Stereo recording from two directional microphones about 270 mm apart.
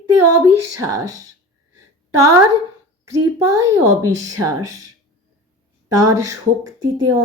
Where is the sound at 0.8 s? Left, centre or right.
Centre.